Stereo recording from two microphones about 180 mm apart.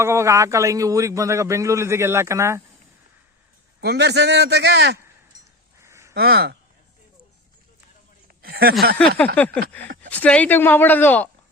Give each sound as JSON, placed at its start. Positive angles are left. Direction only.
{"t": 0.0, "sound": "a man's voice", "side_deg": -15}
{"t": 3.8, "sound": "a man's voice", "side_deg": -70}
{"t": 5.8, "sound": "a sound", "side_deg": -15}
{"t": 6.1, "sound": "speech", "side_deg": -60}
{"t": 8.4, "sound": "a sound", "side_deg": -60}
{"t": 9.0, "sound": "speech", "side_deg": 10}